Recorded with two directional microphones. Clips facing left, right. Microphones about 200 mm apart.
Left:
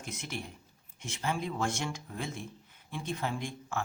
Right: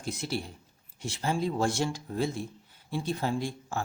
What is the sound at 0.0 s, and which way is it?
Speech, 35° right (ahead or behind).